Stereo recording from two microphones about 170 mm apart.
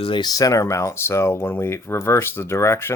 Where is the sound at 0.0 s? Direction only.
25° left (ahead or behind).